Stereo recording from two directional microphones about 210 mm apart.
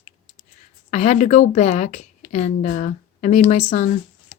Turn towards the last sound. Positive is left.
turn(degrees=35)  # may be behind; listen again after turning